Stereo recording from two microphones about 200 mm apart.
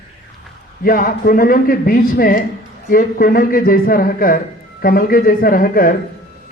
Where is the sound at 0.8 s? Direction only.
45° left (ahead or behind).